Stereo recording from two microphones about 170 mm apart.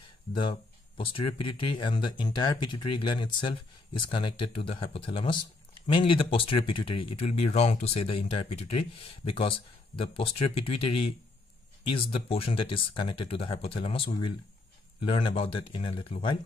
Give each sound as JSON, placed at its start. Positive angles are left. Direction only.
{"t": 0.3, "sound": "speech", "side_deg": 30}